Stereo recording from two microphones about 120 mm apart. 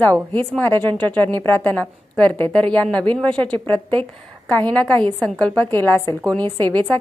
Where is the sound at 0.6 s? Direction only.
15° left (ahead or behind).